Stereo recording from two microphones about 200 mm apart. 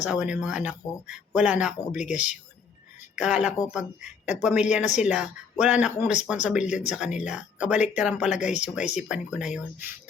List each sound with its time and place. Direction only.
0.0 s speech: 5° right (ahead or behind)